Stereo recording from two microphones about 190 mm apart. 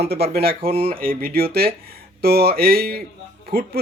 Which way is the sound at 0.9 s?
50° right (ahead or behind).